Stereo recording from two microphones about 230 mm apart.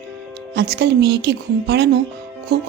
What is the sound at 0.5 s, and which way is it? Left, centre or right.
A woman's voice, right.